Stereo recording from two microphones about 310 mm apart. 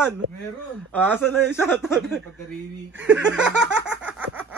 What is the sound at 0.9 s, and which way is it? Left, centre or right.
A man's voice, centre.